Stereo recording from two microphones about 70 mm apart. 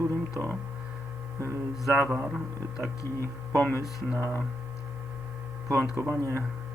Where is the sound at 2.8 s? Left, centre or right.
Right.